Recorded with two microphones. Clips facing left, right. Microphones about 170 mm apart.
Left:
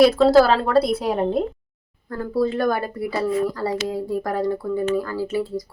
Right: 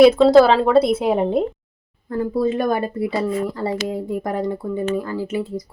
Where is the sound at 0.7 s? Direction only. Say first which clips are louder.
Right 3 dB; 20° right (ahead or behind).